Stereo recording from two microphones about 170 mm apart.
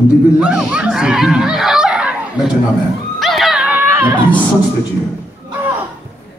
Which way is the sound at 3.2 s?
Centre (ahead or behind).